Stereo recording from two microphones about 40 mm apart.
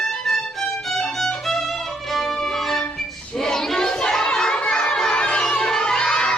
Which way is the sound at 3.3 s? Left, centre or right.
Centre.